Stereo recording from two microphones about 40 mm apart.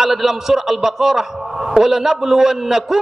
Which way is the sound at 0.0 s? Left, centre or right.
Centre.